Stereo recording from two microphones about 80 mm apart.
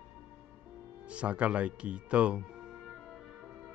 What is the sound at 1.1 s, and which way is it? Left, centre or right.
Speech, centre.